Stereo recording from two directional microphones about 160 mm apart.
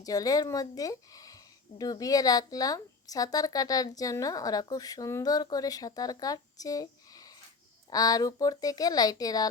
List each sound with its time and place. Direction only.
0.0 s a woman's voice: 20° left (ahead or behind)